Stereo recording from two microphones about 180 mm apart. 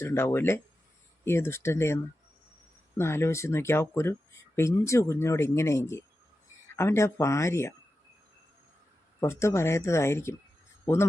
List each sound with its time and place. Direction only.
0.0 s speech: 15° left (ahead or behind)
3.0 s speech: 15° left (ahead or behind)
9.2 s speech: 15° left (ahead or behind)